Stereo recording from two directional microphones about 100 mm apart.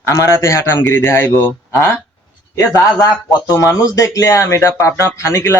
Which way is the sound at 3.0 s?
30° left (ahead or behind).